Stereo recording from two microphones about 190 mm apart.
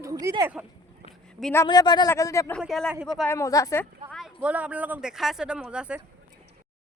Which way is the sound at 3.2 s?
15° left (ahead or behind).